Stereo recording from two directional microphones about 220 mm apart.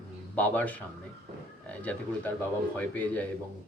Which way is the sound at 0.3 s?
5° left (ahead or behind).